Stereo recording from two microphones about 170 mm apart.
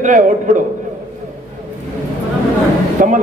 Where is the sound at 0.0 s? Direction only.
50° right (ahead or behind).